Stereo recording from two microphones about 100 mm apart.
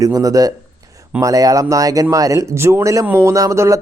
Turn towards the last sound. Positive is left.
turn(degrees=-30)  # may be behind; listen again after turning